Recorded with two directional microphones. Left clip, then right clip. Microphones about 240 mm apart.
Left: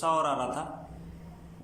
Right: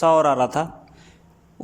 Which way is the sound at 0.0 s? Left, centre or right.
Right.